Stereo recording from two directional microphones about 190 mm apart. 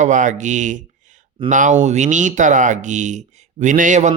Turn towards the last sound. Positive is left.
turn(degrees=-40)  # may be behind; listen again after turning